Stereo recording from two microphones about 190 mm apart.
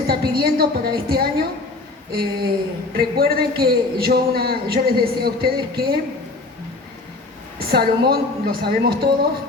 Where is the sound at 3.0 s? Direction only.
55° right (ahead or behind).